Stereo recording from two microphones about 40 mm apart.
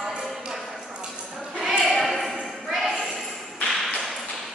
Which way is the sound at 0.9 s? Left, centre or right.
Right.